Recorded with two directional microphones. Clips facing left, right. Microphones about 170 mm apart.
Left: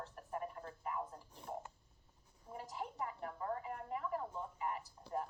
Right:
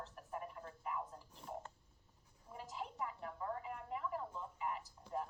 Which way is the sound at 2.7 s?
40° left (ahead or behind).